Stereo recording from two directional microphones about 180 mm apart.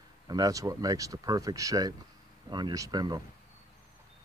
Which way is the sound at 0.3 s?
20° right (ahead or behind).